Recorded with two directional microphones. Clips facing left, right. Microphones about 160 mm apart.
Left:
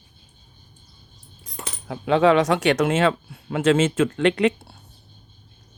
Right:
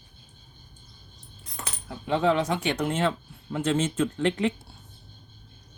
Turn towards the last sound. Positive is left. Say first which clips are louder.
# left 6 dB
turn(degrees=80)